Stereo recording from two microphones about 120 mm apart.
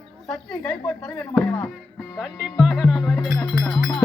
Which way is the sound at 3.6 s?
Centre (ahead or behind).